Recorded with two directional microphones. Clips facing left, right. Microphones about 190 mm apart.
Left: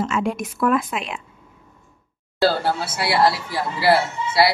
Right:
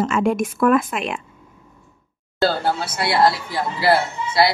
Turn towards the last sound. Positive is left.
turn(degrees=5)  # may be behind; listen again after turning